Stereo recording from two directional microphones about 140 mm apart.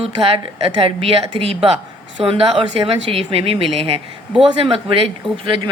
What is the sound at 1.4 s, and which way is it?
A woman's voice, 45° right (ahead or behind).